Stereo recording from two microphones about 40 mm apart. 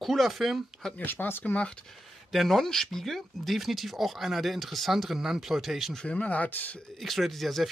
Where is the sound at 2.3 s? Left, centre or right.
Centre.